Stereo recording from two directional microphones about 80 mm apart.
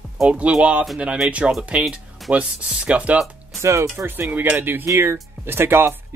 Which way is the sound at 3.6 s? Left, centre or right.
Right.